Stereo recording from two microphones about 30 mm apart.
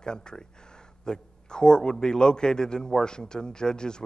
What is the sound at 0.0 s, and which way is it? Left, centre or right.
A man's voice, left.